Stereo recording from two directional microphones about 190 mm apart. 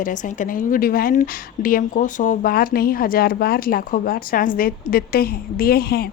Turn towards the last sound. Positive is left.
turn(degrees=55)  # may be behind; listen again after turning